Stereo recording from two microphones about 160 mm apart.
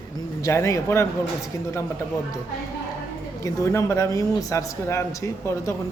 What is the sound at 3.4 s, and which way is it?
Speech, 20° left (ahead or behind).